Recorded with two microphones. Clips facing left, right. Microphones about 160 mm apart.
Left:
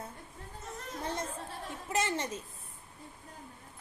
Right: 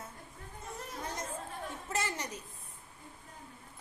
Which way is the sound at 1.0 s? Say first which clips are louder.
Left 4 dB; 30° left (ahead or behind).